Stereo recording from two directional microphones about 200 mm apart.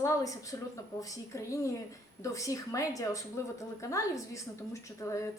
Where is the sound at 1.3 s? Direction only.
15° left (ahead or behind).